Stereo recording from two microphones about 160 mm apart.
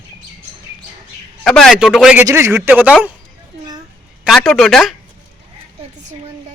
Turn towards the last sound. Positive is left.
turn(degrees=0)  # may be behind; listen again after turning